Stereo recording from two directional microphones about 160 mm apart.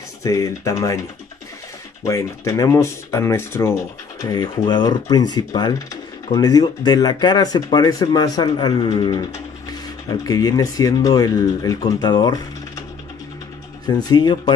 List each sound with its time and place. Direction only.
0.2 s speech: 20° left (ahead or behind)
2.0 s speech: 20° left (ahead or behind)
13.8 s speech: 25° left (ahead or behind)